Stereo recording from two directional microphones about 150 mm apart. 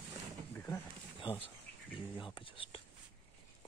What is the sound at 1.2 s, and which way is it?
Bird, 35° left (ahead or behind).